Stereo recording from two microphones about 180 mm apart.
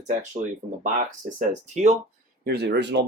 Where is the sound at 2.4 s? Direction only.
65° right (ahead or behind).